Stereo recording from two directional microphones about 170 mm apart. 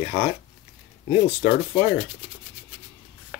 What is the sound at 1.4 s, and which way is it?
Sanding, 55° left (ahead or behind).